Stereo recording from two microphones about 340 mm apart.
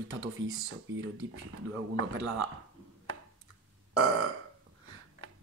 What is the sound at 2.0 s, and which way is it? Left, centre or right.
Speech, right.